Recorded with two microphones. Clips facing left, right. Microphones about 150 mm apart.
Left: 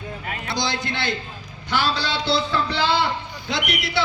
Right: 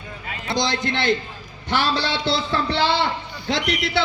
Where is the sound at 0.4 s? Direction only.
20° right (ahead or behind).